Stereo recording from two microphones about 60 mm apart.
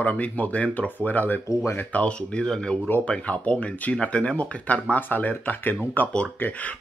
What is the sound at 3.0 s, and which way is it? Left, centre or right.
Speech, left.